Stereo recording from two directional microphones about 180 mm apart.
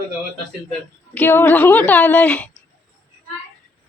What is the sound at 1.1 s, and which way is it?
A woman's voice, 10° left (ahead or behind).